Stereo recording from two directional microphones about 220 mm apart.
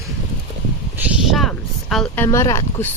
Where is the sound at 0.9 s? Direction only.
5° right (ahead or behind).